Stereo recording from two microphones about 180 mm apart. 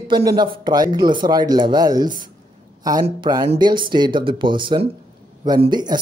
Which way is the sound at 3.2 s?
20° right (ahead or behind).